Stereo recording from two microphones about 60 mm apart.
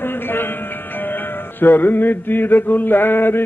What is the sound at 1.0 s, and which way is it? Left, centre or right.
Mantra, left.